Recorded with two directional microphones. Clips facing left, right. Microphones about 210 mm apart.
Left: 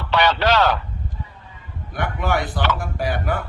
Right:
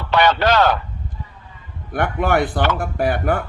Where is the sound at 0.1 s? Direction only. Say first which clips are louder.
Right 2 dB; 50° right (ahead or behind).